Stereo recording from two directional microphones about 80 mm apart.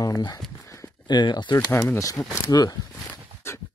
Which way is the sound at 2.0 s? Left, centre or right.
Left.